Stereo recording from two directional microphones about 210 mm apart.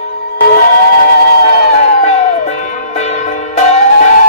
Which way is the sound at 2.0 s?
35° left (ahead or behind).